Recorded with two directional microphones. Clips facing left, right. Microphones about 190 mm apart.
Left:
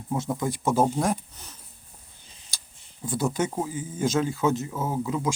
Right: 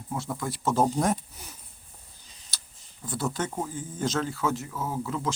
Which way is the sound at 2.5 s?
10° left (ahead or behind).